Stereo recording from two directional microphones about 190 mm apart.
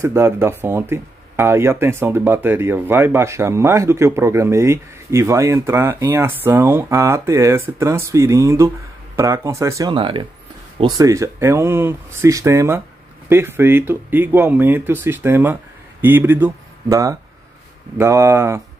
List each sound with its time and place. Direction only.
0.0 s speech: 15° right (ahead or behind)